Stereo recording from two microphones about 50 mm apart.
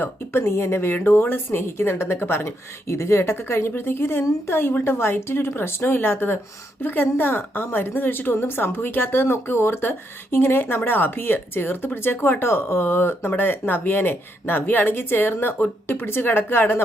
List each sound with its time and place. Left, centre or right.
0.0 s a woman's voice: left
0.9 s speech: left
2.8 s a woman's voice: left